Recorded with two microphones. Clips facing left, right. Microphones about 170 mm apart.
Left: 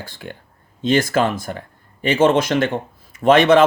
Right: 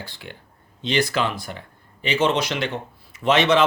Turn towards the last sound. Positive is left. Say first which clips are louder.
# left 6 dB
turn(degrees=50)  # may be behind; listen again after turning